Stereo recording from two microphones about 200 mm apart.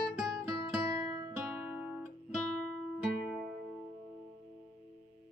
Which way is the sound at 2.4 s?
5° left (ahead or behind).